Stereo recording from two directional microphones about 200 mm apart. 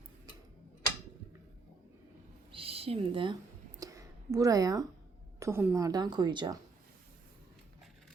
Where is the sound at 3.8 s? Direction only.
15° right (ahead or behind).